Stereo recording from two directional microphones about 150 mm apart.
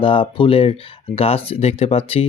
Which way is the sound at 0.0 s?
35° left (ahead or behind).